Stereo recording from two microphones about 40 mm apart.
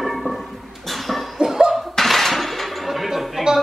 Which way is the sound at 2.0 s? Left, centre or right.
Centre.